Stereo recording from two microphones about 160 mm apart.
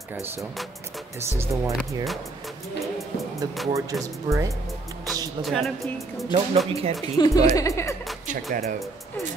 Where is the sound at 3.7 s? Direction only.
20° right (ahead or behind).